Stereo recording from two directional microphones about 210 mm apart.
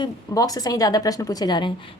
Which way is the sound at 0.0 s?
20° left (ahead or behind).